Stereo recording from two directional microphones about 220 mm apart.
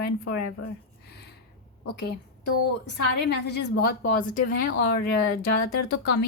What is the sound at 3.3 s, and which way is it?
Speech, 50° left (ahead or behind).